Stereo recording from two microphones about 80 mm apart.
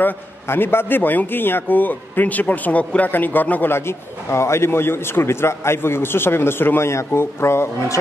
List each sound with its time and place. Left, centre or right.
0.0 s a man's voice: left